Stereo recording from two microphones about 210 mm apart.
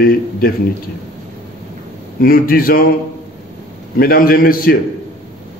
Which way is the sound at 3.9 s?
45° left (ahead or behind).